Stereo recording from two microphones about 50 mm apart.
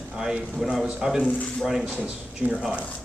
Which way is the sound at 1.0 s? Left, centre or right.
Centre.